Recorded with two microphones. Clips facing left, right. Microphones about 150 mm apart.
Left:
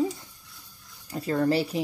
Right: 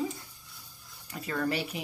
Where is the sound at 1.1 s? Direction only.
30° left (ahead or behind).